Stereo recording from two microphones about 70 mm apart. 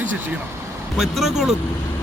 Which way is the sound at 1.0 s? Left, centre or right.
Centre.